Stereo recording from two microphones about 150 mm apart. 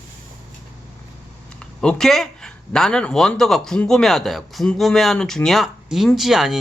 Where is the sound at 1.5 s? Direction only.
5° left (ahead or behind).